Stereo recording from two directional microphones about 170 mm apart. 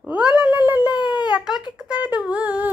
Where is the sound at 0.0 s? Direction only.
10° right (ahead or behind).